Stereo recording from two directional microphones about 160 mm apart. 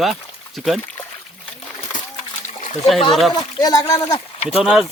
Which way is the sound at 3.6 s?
25° left (ahead or behind).